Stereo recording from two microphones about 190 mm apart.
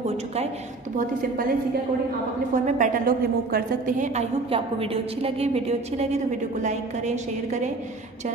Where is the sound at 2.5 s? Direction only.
40° right (ahead or behind).